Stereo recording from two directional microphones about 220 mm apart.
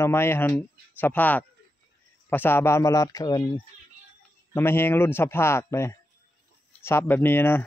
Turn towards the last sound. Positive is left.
turn(degrees=10)  # may be behind; listen again after turning